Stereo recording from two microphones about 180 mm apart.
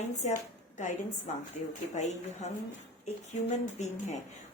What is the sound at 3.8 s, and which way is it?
Speech, 40° left (ahead or behind).